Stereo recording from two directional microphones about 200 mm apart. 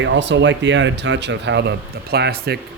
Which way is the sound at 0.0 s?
60° right (ahead or behind).